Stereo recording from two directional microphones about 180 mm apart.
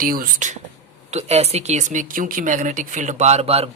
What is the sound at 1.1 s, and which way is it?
Speech, 35° right (ahead or behind).